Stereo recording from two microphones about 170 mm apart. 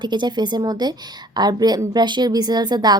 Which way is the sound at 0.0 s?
25° right (ahead or behind).